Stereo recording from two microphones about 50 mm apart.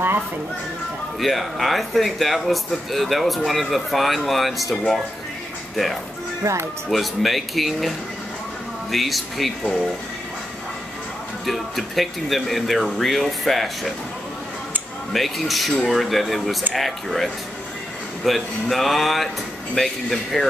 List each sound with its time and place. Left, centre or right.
1.2 s speech: centre
6.4 s speech: right
6.9 s speech: centre
8.9 s speech: centre
11.4 s speech: centre
15.1 s speech: centre